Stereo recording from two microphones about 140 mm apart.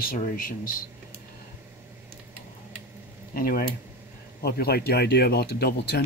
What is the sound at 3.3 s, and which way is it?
Speech, 90° left.